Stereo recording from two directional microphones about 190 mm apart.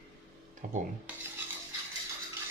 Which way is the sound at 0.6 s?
45° right (ahead or behind).